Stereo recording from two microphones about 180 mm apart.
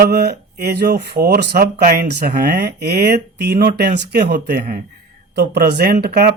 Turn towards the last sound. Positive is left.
turn(degrees=-60)  # may be behind; listen again after turning